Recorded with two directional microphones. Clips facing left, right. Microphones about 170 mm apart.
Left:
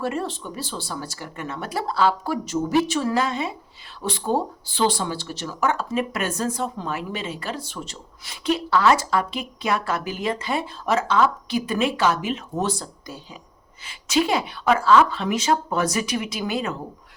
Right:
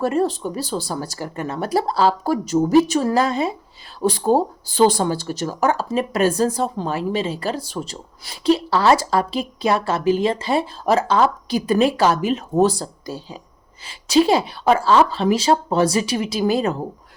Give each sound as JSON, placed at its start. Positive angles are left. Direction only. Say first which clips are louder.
{"t": 0.0, "sound": "speech", "louder": "right 7 dB", "side_deg": -40}